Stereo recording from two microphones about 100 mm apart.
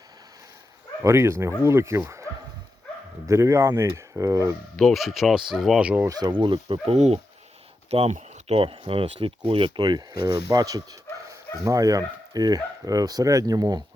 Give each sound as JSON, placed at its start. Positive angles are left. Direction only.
{"t": 1.0, "sound": "speech", "side_deg": -25}
{"t": 4.8, "sound": "speech", "side_deg": 0}
{"t": 5.8, "sound": "speech", "side_deg": -15}
{"t": 6.1, "sound": "speech", "side_deg": -35}
{"t": 6.3, "sound": "speech", "side_deg": -55}